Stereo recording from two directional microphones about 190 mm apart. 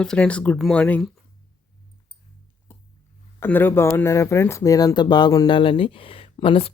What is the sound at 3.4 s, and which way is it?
Speech, 10° left (ahead or behind).